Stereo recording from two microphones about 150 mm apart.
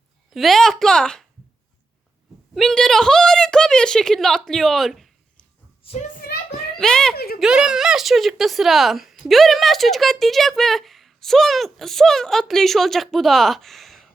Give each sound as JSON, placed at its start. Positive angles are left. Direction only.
{"t": 0.3, "sound": "speech", "side_deg": 0}
{"t": 2.6, "sound": "speech", "side_deg": 5}
{"t": 6.1, "sound": "a sound", "side_deg": 90}
{"t": 6.7, "sound": "a child's voice", "side_deg": 5}